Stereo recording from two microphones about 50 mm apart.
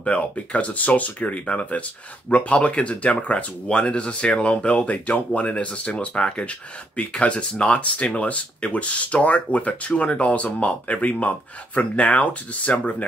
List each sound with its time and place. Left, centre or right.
0.0 s speech: left